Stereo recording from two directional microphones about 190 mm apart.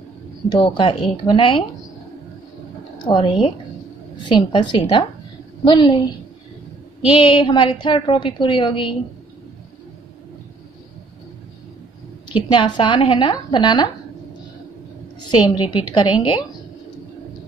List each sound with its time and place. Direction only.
0.5 s a woman's voice: 25° left (ahead or behind)
3.2 s a woman's voice: 30° left (ahead or behind)
7.2 s a woman's voice: 25° left (ahead or behind)
12.4 s a woman's voice: 25° left (ahead or behind)
15.1 s a woman's voice: 25° left (ahead or behind)